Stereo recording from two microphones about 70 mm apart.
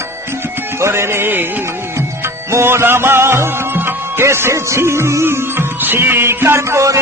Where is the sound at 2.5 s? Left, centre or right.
Right.